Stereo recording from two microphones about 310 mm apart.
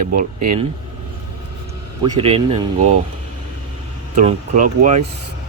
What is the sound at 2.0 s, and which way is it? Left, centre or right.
Speech, centre.